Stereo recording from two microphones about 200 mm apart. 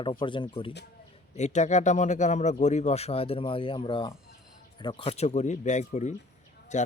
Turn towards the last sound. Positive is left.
turn(degrees=35)  # may be behind; listen again after turning